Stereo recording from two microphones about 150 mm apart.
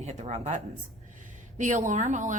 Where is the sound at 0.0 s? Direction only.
45° right (ahead or behind).